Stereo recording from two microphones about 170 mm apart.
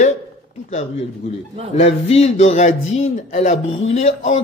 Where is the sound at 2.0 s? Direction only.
35° left (ahead or behind).